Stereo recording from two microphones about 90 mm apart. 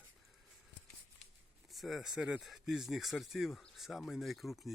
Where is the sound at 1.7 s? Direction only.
Centre (ahead or behind).